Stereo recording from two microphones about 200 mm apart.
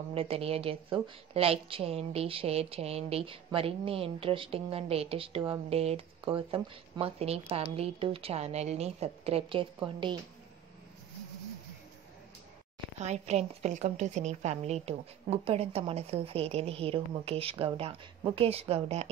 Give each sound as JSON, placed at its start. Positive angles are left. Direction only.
{"t": 0.1, "sound": "a woman's voice", "side_deg": -30}
{"t": 13.0, "sound": "a woman's voice", "side_deg": -35}